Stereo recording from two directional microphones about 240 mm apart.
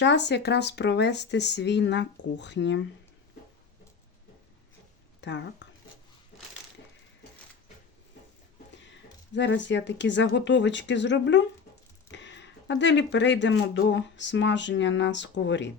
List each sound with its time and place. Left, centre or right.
0.0 s speech: left
5.2 s speech: left
9.3 s speech: left